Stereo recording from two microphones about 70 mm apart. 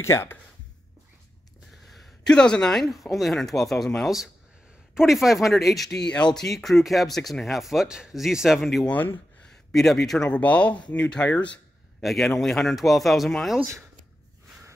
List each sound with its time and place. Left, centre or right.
0.0 s speech: left
1.9 s a sound: centre
2.3 s speech: centre
4.9 s speech: centre
5.9 s speech: centre
6.3 s speech: centre
8.8 s speech: left
9.4 s speech: centre
10.3 s speech: centre
12.0 s speech: centre